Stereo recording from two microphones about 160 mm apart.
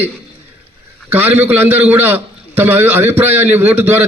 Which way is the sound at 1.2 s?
10° right (ahead or behind).